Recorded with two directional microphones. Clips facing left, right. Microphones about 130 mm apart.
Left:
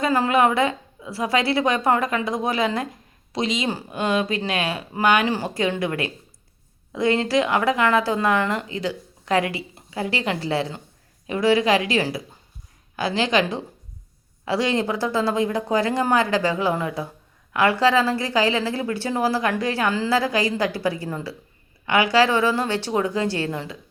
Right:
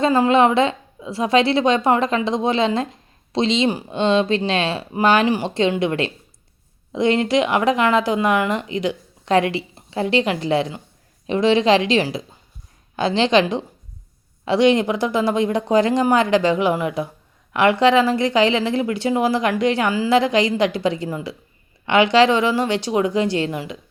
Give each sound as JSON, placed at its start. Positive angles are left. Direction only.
{"t": 0.0, "sound": "a woman's voice", "side_deg": -20}